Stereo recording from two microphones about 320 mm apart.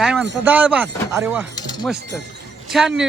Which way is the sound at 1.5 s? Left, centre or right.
Centre.